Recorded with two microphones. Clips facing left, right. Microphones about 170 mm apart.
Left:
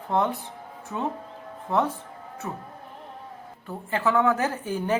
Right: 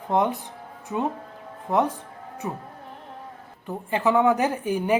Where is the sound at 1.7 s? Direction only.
15° right (ahead or behind).